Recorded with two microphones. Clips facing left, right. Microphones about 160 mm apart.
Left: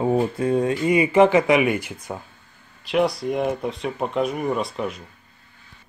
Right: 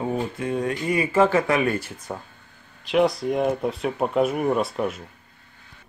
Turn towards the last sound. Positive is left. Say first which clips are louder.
# right 2 dB
turn(degrees=-5)  # may be behind; listen again after turning